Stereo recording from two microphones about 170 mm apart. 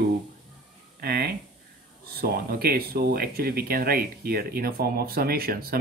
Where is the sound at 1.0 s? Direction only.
65° right (ahead or behind).